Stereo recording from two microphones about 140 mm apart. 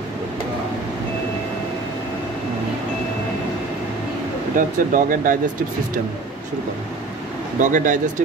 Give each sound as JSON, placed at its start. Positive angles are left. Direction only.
{"t": 4.6, "sound": "speech", "side_deg": -75}
{"t": 7.6, "sound": "speech", "side_deg": -65}